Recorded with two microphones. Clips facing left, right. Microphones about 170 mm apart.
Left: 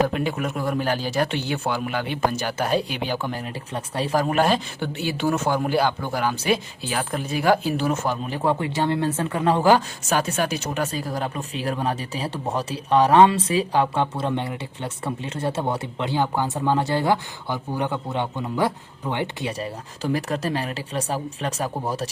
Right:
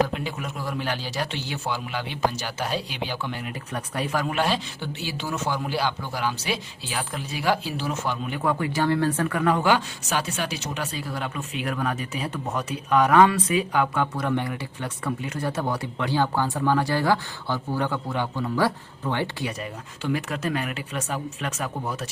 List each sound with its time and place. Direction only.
0.1 s speech: 55° left (ahead or behind); by 3.5 s 40° left (ahead or behind)
3.7 s speech: 30° left (ahead or behind)
8.4 s speech: 25° left (ahead or behind)